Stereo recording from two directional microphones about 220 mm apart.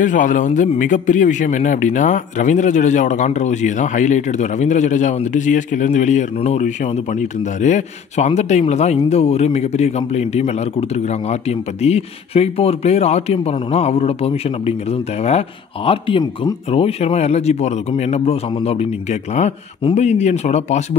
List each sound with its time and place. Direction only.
0.0 s speech: 35° left (ahead or behind)